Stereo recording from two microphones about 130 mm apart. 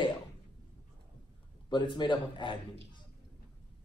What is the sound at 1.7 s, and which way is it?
A man's voice, 40° left (ahead or behind).